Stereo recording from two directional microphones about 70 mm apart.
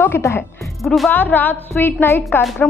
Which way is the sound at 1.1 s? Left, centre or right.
Left.